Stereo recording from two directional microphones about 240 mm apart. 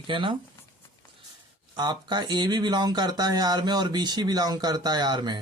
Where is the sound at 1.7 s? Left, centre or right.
Centre.